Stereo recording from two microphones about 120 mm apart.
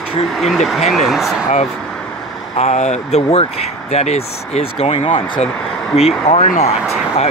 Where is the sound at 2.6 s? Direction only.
70° left (ahead or behind).